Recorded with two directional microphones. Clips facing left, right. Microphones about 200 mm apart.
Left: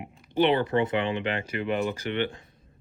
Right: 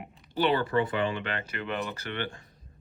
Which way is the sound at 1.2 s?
10° left (ahead or behind).